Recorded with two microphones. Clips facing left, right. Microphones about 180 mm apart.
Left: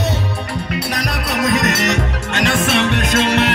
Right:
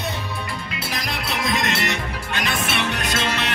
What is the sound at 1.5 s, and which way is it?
Music, 40° left (ahead or behind).